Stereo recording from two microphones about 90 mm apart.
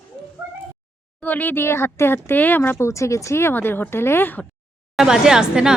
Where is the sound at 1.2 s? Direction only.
20° left (ahead or behind).